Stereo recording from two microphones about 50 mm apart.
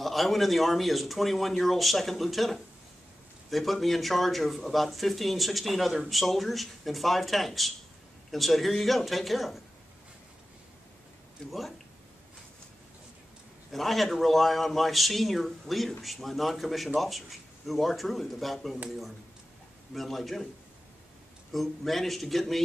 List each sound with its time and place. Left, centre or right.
0.0 s speech: centre
11.4 s speech: centre
13.7 s speech: centre
19.9 s speech: centre
21.5 s speech: centre